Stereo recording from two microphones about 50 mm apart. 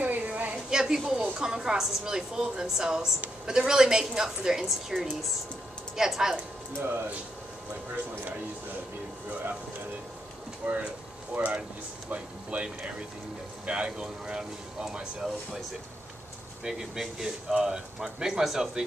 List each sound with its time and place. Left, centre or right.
0.0 s a sound: right
0.7 s a sound: centre
1.4 s speech: centre
6.8 s speech: right
10.6 s speech: right
13.7 s speech: centre
16.6 s speech: centre